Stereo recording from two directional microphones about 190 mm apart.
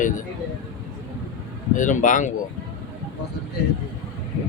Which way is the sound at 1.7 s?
40° left (ahead or behind).